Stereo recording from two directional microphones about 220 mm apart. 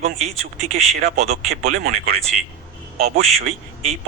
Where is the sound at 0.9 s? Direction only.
30° right (ahead or behind).